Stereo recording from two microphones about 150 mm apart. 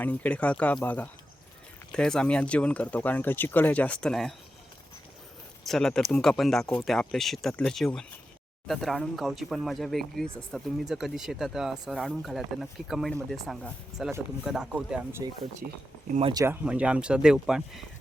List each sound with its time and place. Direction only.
0.0 s speech: 10° left (ahead or behind)
5.6 s speech: centre (ahead or behind)
16.3 s speech: 20° right (ahead or behind)
16.6 s speech: 5° right (ahead or behind)